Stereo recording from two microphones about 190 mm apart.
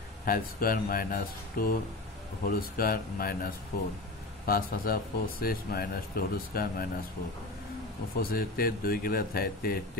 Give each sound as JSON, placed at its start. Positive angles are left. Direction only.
{"t": 0.2, "sound": "speech", "side_deg": 50}
{"t": 8.2, "sound": "speech", "side_deg": 50}